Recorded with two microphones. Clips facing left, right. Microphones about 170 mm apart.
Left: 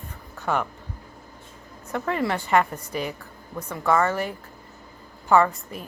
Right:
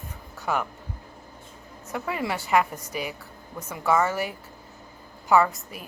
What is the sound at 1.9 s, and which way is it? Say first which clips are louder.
A woman's voice: left 4 dB; 10° right (ahead or behind).